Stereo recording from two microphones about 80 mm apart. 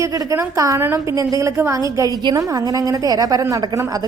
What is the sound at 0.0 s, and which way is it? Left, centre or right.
A woman's voice, right.